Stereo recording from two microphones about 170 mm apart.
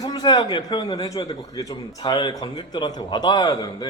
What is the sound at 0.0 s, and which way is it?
A man's voice, 25° left (ahead or behind).